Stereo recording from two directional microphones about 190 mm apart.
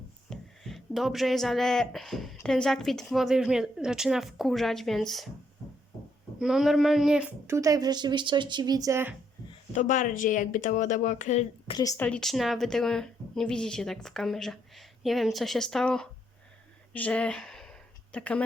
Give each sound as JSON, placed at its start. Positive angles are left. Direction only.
{"t": 0.3, "sound": "speech", "side_deg": 0}
{"t": 6.4, "sound": "speech", "side_deg": 0}
{"t": 9.7, "sound": "speech", "side_deg": 40}
{"t": 11.7, "sound": "a woman's voice", "side_deg": 20}
{"t": 12.0, "sound": "speech", "side_deg": 5}
{"t": 16.9, "sound": "a sound", "side_deg": 5}